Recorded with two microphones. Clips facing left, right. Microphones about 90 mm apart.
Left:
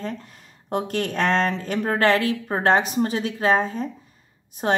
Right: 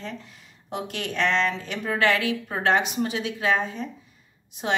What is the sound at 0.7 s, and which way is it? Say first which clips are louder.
A woman's voice: left 6 dB; 45° left (ahead or behind).